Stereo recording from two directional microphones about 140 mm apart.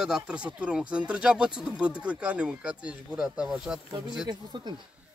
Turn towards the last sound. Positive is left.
turn(degrees=-30)  # may be behind; listen again after turning